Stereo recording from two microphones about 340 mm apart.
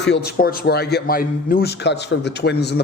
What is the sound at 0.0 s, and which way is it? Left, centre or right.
A man's voice, left.